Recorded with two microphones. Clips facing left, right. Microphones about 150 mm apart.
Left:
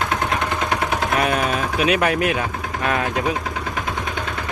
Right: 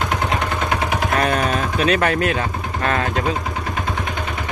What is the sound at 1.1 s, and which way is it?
Vehicle, 10° left (ahead or behind).